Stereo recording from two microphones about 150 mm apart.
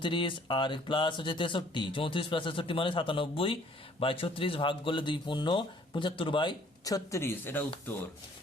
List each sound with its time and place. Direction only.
0.0 s speech: 35° left (ahead or behind); by 7.6 s 15° left (ahead or behind)